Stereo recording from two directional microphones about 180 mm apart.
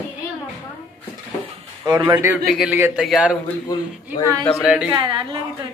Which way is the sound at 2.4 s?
Centre (ahead or behind).